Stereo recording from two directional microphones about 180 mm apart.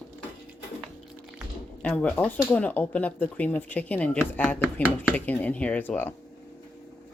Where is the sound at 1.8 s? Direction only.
5° left (ahead or behind).